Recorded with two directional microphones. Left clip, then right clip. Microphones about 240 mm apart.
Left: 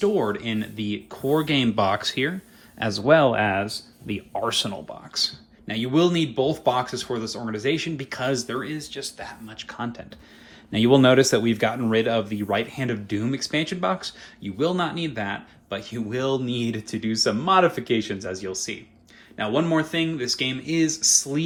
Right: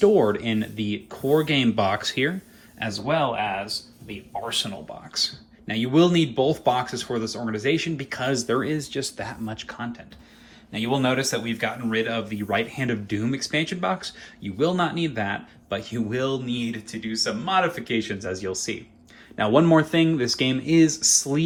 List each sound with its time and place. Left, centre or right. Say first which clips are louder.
0.0 s speech: right 4 dB; centre
2.7 s speech: left 7 dB; centre
4.4 s speech: left 2 dB; centre
5.1 s speech: left 1 dB; centre
8.6 s speech: right 4 dB; centre
9.6 s speech: left 2 dB; centre
10.7 s speech: left 7 dB; left; by 21.4 s centre